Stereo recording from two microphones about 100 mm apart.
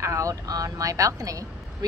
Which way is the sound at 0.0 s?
30° right (ahead or behind).